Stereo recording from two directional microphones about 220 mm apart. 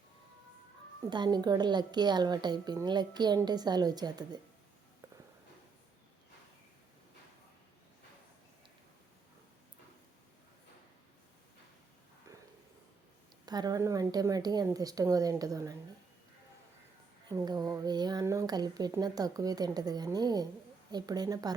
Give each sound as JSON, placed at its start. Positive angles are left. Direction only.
{"t": 1.1, "sound": "a woman's voice", "side_deg": -20}
{"t": 13.4, "sound": "a woman's voice", "side_deg": -20}
{"t": 17.2, "sound": "a woman's voice", "side_deg": -20}